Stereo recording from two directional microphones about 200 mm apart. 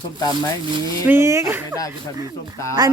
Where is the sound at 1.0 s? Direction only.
15° right (ahead or behind).